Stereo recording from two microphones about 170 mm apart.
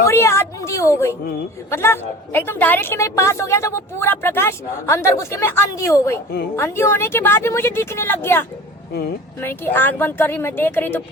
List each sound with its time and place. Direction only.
0.1 s a woman's voice: 15° left (ahead or behind)
8.9 s speech: 70° left (ahead or behind)
9.4 s a woman's voice: 15° left (ahead or behind)